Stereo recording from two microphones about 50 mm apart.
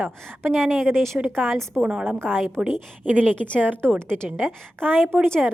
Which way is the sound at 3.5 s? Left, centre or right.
Right.